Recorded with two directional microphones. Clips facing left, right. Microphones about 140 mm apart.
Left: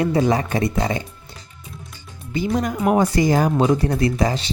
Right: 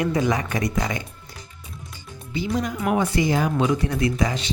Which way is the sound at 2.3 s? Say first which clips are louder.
Left 4 dB; 50° left (ahead or behind).